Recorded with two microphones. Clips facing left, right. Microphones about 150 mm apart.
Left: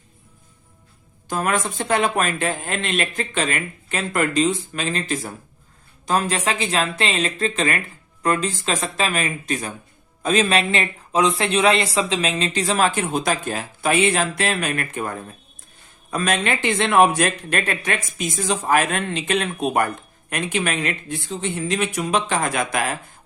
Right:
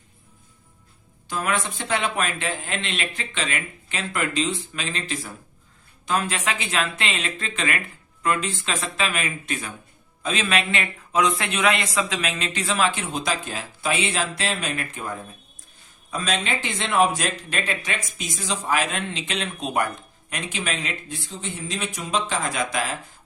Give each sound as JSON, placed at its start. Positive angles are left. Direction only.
{"t": 1.3, "sound": "a man's voice", "side_deg": 45}